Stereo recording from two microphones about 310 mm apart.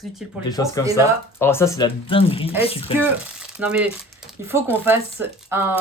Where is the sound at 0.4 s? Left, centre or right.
Centre.